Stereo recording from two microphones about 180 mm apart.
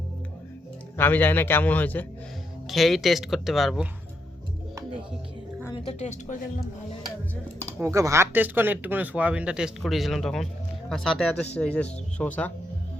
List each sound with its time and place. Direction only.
0.9 s a man's voice: 10° left (ahead or behind)
5.7 s speech: 40° left (ahead or behind)
7.6 s speech: 15° right (ahead or behind); by 12.5 s 5° left (ahead or behind)